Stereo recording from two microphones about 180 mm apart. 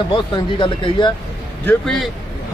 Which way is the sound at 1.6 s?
Centre (ahead or behind).